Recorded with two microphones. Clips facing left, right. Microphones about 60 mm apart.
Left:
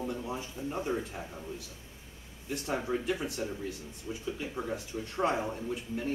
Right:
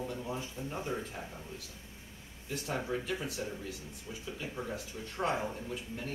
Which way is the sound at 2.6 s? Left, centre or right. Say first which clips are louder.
Left 4 dB; centre.